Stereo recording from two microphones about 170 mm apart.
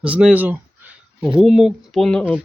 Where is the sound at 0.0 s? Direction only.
5° right (ahead or behind).